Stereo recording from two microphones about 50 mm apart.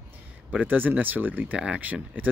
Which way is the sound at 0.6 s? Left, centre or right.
Right.